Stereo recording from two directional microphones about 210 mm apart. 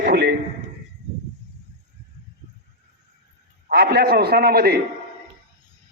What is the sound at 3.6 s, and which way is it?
A man's voice, 50° right (ahead or behind).